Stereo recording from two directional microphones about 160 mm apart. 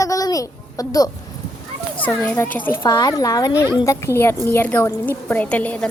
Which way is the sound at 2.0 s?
10° left (ahead or behind).